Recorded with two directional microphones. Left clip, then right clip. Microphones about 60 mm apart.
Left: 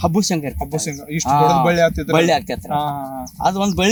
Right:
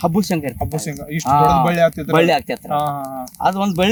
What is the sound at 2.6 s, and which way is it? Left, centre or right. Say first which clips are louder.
Speech: right 1 dB; right.